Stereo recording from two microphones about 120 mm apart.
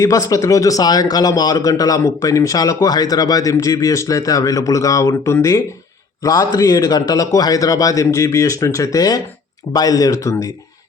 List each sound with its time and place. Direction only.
0.0 s speech: 30° left (ahead or behind)